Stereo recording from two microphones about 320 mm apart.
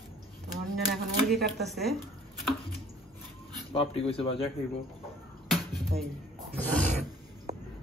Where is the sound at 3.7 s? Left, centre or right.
Centre.